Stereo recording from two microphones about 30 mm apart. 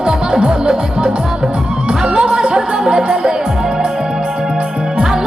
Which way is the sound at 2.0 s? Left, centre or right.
Right.